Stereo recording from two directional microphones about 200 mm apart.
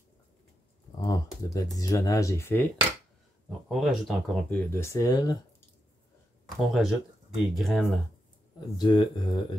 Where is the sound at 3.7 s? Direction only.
Centre (ahead or behind).